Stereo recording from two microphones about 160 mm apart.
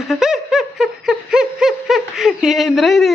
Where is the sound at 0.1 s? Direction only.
5° right (ahead or behind).